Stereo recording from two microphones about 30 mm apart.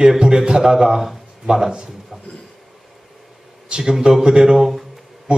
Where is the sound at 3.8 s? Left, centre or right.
Centre.